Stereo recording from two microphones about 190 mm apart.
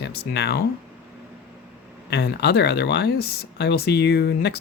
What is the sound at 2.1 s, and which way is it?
Speech, 60° left (ahead or behind).